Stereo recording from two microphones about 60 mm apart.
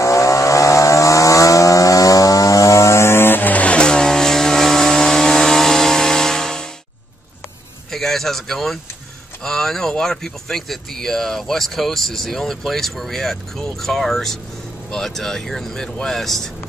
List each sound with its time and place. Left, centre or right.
0.0 s vehicle: left; by 6.7 s centre
7.9 s a sound: centre
9.4 s speech: centre